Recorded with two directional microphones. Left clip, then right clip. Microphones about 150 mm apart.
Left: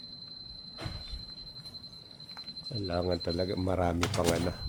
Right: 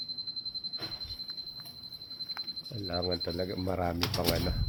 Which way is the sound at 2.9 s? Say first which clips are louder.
Left 1 dB; 30° left (ahead or behind).